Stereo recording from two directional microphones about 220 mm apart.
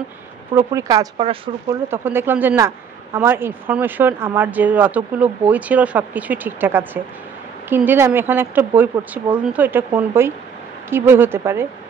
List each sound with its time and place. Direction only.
0.6 s speech: 15° right (ahead or behind)
1.9 s speech: 10° right (ahead or behind)